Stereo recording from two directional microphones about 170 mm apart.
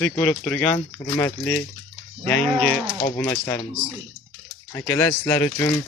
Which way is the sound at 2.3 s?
5° left (ahead or behind).